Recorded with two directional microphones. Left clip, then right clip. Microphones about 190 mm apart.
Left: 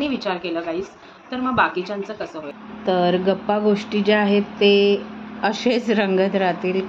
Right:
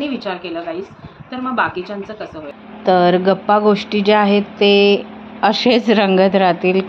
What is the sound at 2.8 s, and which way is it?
Speech, 20° right (ahead or behind).